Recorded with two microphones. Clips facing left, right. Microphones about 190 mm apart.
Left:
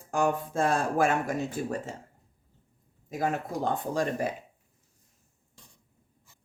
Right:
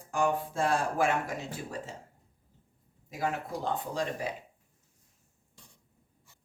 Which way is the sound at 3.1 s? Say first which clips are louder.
Left 3 dB; 45° left (ahead or behind).